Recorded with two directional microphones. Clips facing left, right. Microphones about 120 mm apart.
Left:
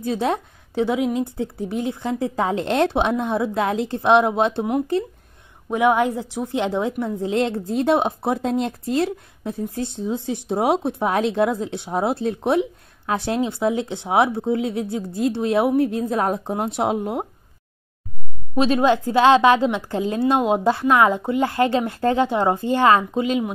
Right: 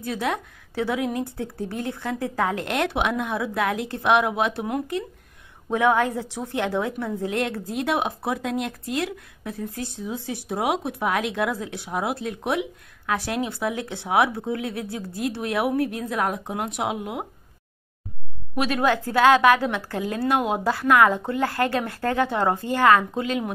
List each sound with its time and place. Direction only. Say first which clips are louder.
0.0 s a woman's voice: left 5 dB; 25° left (ahead or behind)
5.7 s a woman's voice: left 2 dB; 15° left (ahead or behind); by 17.3 s 35° left (ahead or behind)
18.5 s a woman's voice: left 5 dB; 25° left (ahead or behind)